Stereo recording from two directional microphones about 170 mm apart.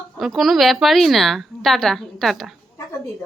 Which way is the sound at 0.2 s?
Centre (ahead or behind).